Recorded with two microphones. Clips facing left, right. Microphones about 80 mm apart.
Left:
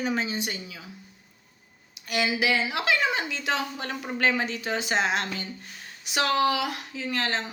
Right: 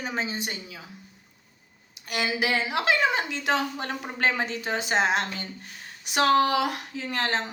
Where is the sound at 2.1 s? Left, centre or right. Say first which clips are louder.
Left 1 dB; right.